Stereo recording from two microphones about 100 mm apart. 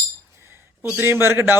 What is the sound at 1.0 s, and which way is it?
Speech, 25° right (ahead or behind).